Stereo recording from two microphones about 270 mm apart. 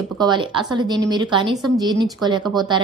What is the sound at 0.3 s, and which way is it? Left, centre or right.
A woman's voice, centre.